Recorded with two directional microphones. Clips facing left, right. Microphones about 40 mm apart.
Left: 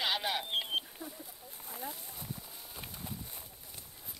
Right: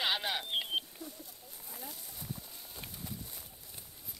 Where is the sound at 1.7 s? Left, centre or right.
Centre.